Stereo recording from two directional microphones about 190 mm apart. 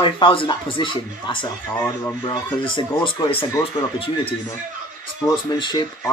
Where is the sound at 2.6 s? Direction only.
25° left (ahead or behind).